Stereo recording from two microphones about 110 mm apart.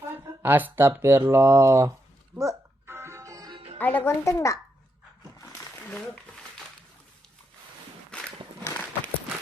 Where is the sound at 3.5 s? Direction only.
65° right (ahead or behind).